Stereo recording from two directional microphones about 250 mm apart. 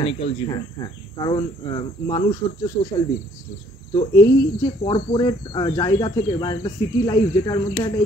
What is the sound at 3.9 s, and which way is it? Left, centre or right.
Speech, centre.